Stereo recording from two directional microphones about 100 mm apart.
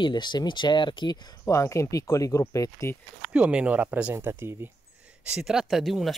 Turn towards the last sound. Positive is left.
turn(degrees=0)  # may be behind; listen again after turning